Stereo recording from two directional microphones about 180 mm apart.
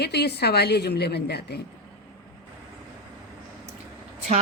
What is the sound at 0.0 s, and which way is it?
A woman's voice, 65° left (ahead or behind).